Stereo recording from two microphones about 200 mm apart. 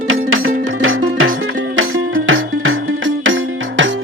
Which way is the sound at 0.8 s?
80° right.